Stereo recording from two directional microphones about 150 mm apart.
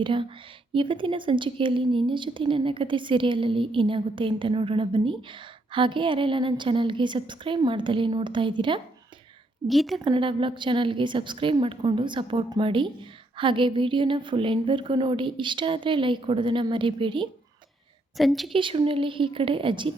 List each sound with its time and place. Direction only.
0.0 s a woman's voice: 35° right (ahead or behind)
9.6 s a woman's voice: centre (ahead or behind)
10.0 s a woman's voice: 35° right (ahead or behind)
18.2 s a woman's voice: centre (ahead or behind)
18.5 s a woman's voice: 35° right (ahead or behind)